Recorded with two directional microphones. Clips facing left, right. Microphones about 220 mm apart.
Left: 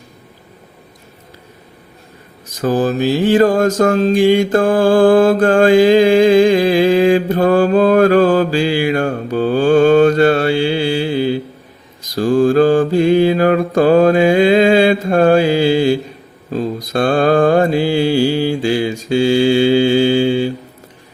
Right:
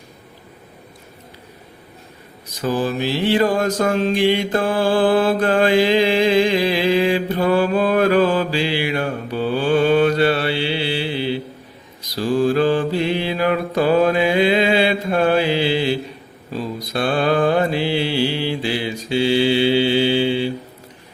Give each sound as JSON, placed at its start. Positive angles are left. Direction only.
{"t": 2.6, "sound": "mantra", "side_deg": 45}